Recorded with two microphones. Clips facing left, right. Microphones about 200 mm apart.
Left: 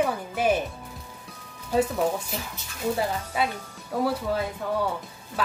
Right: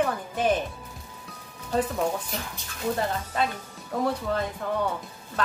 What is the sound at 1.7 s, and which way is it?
Speech, 5° left (ahead or behind).